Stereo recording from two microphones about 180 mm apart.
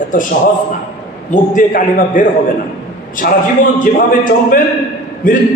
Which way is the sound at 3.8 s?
50° left (ahead or behind).